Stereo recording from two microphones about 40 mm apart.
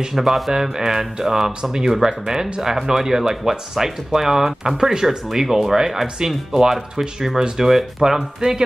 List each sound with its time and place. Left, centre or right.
0.1 s speech: centre
7.5 s speech: centre
8.0 s speech: centre